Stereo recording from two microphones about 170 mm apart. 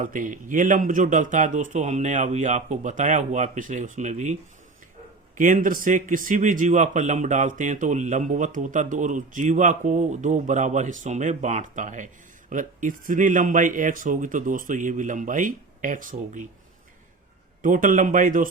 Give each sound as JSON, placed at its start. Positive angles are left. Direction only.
{"t": 0.0, "sound": "speech", "side_deg": -50}
{"t": 5.4, "sound": "speech", "side_deg": -50}
{"t": 17.6, "sound": "speech", "side_deg": -50}